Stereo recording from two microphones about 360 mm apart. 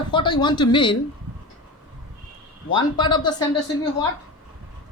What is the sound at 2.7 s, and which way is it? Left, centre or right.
A woman's voice, centre.